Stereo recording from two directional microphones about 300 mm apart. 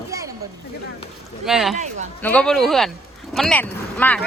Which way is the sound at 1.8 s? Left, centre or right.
Right.